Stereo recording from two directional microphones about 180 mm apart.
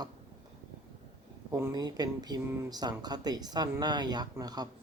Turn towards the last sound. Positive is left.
turn(degrees=-20)  # may be behind; listen again after turning